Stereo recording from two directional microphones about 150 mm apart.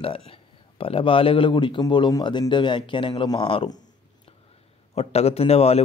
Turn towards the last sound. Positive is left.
turn(degrees=45)  # may be behind; listen again after turning